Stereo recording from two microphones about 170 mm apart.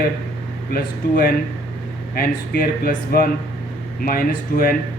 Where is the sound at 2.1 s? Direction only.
60° left (ahead or behind).